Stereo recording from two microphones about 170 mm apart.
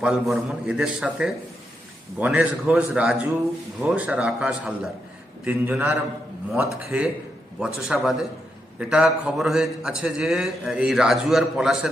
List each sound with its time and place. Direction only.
0.0 s a man's voice: 5° right (ahead or behind)